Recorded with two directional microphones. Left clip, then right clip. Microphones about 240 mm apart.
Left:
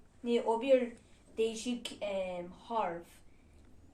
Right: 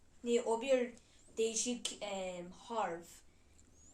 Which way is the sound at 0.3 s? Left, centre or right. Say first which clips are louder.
Left 4 dB; centre.